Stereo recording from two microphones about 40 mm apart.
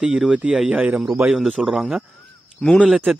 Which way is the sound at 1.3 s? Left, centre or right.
Centre.